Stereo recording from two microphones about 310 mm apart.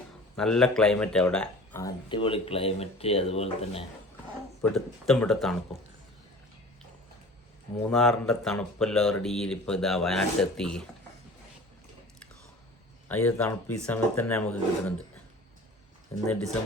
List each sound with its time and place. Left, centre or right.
0.3 s speech: centre
4.6 s speech: centre
7.8 s speech: centre
13.1 s speech: centre